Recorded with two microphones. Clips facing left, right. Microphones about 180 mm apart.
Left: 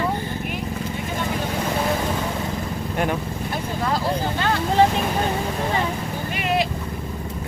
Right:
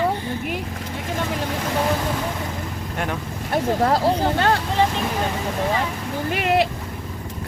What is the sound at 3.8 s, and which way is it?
Speech, 65° right (ahead or behind).